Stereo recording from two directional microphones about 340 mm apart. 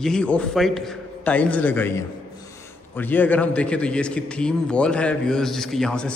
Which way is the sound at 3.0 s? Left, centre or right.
Centre.